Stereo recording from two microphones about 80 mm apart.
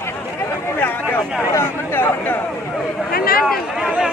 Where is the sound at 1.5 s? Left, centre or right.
Left.